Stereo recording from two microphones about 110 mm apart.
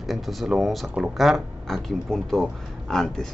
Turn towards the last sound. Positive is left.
turn(degrees=5)  # may be behind; listen again after turning